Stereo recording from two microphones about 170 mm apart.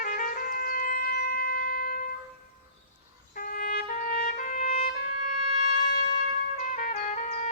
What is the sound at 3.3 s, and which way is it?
Trumpet, 55° left (ahead or behind).